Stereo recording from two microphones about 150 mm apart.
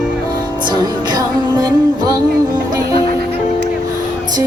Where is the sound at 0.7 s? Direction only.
25° right (ahead or behind).